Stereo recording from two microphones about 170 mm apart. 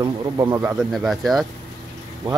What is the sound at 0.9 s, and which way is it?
Speech, centre (ahead or behind).